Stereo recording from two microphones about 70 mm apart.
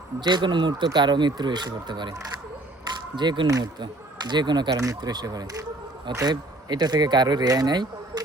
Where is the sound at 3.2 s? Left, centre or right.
Right.